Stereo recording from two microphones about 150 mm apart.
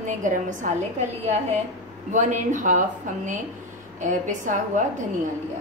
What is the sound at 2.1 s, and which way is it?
Speech, 55° right (ahead or behind).